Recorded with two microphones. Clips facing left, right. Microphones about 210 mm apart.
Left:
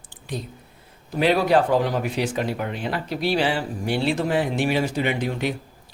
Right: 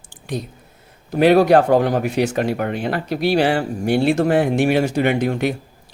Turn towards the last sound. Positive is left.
turn(degrees=-50)  # may be behind; listen again after turning